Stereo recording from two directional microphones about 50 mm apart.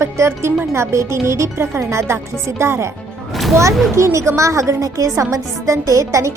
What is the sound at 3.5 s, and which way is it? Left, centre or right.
A woman's voice, right.